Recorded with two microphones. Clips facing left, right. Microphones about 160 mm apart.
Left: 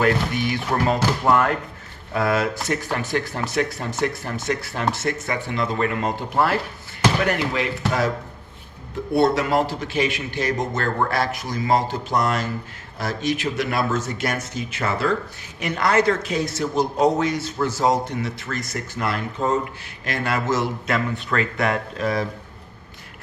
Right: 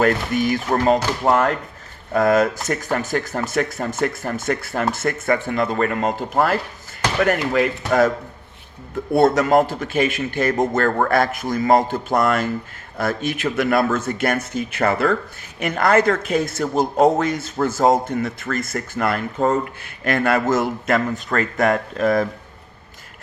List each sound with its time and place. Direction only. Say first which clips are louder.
0.0 s a man's voice: right 3 dB; 45° right (ahead or behind)
9.1 s a man's voice: right 4 dB; 45° right (ahead or behind)